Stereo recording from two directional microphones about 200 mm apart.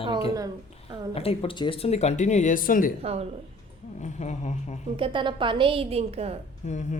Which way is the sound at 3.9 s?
35° left (ahead or behind).